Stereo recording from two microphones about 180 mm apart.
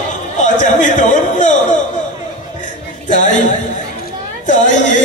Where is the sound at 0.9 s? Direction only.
45° left (ahead or behind).